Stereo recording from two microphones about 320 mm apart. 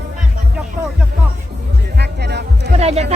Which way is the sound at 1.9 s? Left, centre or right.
Right.